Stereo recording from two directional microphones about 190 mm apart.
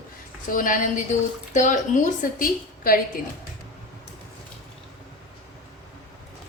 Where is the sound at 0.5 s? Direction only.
45° left (ahead or behind).